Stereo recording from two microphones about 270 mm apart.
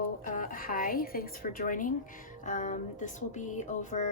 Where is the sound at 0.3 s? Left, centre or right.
Left.